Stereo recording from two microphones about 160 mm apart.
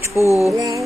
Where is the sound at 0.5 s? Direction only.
20° right (ahead or behind).